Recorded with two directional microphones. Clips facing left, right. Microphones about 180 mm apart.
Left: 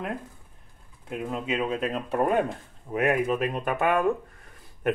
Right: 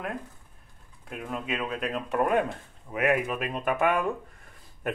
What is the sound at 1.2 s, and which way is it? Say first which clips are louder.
Speech: left 4 dB; 25° left (ahead or behind).